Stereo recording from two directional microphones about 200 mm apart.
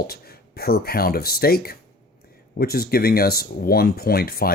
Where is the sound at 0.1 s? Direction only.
50° left (ahead or behind).